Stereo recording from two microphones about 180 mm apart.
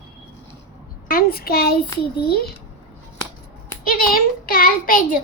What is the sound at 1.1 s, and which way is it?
A child's voice, 55° left (ahead or behind).